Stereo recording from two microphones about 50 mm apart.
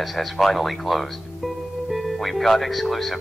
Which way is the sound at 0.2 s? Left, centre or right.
Centre.